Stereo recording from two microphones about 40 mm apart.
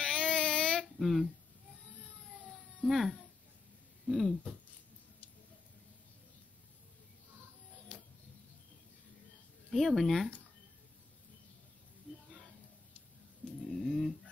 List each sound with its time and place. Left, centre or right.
0.0 s child singing: centre
0.9 s speech: centre
2.8 s speech: centre
9.7 s speech: centre
12.1 s a sound: centre
13.7 s bird: centre